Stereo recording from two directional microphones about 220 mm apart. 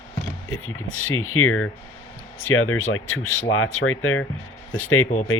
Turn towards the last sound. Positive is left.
turn(degrees=70)  # may be behind; listen again after turning